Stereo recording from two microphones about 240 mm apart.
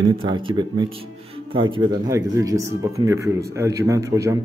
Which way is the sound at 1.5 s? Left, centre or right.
Centre.